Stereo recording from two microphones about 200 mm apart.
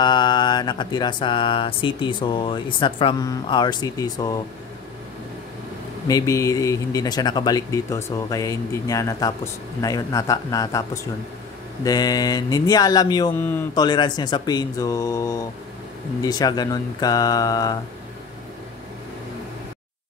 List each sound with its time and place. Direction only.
0.0 s speech: 20° left (ahead or behind)
6.0 s speech: 15° left (ahead or behind)
11.8 s speech: 20° left (ahead or behind)